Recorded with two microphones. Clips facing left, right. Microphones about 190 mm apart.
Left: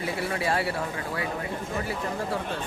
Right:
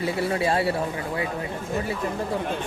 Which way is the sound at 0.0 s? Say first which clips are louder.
Right 5 dB; 25° right (ahead or behind).